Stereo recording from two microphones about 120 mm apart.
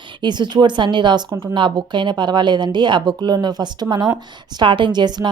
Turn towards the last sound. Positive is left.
turn(degrees=-35)  # may be behind; listen again after turning